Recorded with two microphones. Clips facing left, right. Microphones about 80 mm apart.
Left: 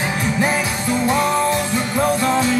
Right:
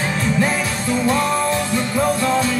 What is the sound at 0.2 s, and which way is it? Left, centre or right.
Music, centre.